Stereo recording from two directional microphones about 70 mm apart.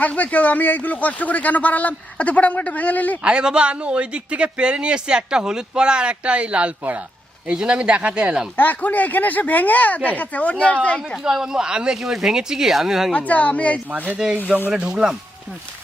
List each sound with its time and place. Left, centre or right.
0.0 s speech: left
3.2 s a man's voice: centre
8.5 s speech: left
11.2 s a man's voice: centre
13.1 s speech: left
14.2 s a man's voice: centre